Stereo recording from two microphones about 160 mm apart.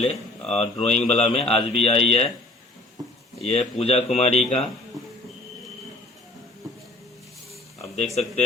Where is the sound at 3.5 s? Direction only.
40° left (ahead or behind).